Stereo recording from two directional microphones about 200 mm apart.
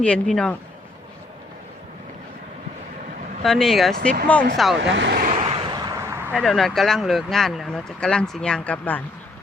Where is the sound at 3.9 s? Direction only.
50° right (ahead or behind).